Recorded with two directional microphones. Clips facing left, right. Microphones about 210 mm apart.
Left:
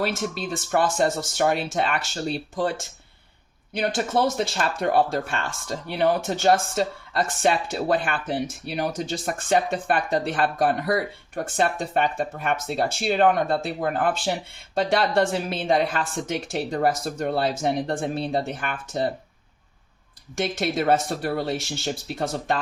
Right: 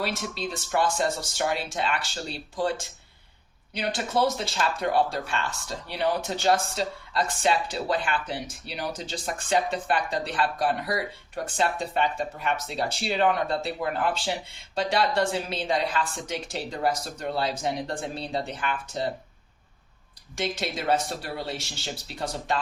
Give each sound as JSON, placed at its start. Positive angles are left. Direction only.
{"t": 0.0, "sound": "speech", "side_deg": 50}
{"t": 3.8, "sound": "speech", "side_deg": 50}
{"t": 20.3, "sound": "speech", "side_deg": 50}